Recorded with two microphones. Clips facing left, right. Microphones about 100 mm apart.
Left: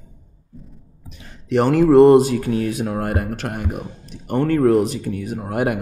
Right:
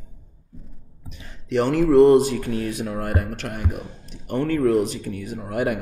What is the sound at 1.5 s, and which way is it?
Speech, 50° left (ahead or behind).